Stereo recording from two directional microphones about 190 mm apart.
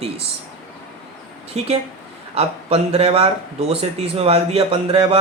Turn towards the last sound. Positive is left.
turn(degrees=-30)  # may be behind; listen again after turning